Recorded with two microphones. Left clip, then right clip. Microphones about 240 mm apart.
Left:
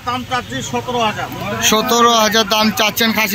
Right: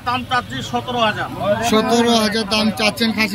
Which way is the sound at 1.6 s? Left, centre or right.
Centre.